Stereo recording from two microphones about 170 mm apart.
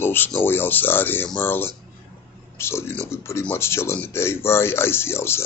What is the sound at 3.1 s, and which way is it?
Speech, 15° left (ahead or behind).